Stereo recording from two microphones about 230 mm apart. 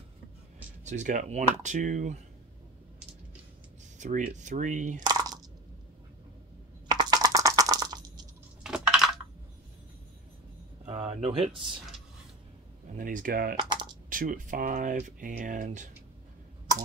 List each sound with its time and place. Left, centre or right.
0.8 s speech: right
4.0 s speech: right
5.0 s coin: centre
6.9 s a sound: centre
8.6 s typing: centre
10.9 s a sound: right
12.9 s speech: right
13.6 s speech: centre
14.0 s speech: right